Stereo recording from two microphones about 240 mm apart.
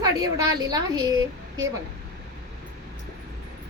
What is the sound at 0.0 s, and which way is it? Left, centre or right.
A woman's voice, centre.